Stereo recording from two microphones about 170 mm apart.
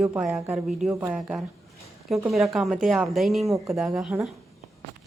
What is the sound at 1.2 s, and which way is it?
Speech, centre (ahead or behind).